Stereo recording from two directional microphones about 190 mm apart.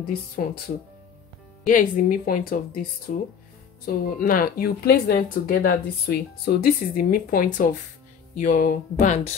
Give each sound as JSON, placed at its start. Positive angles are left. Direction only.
{"t": 0.4, "sound": "speech", "side_deg": 45}
{"t": 1.7, "sound": "speech", "side_deg": 45}